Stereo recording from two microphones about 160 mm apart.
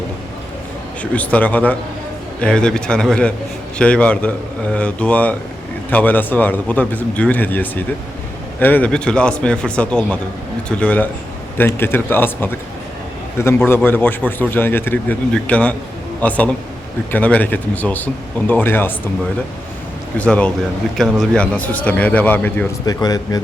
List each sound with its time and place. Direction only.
1.1 s a man's voice: 10° left (ahead or behind)
13.7 s a man's voice: 10° left (ahead or behind)
20.1 s a man's voice: 10° left (ahead or behind)
22.9 s speech: 25° left (ahead or behind)